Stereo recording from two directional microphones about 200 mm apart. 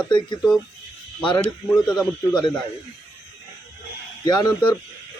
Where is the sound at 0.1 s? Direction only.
20° left (ahead or behind).